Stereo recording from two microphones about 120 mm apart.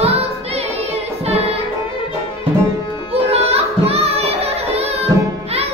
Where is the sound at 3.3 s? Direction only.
60° right (ahead or behind).